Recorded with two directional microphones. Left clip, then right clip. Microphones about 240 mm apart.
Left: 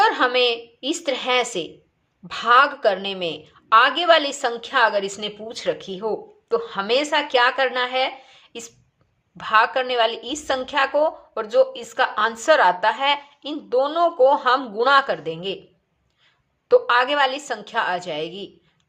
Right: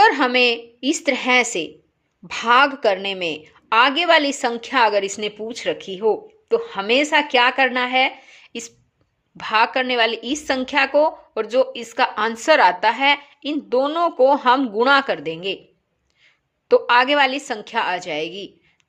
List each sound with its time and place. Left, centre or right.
0.0 s a woman's voice: right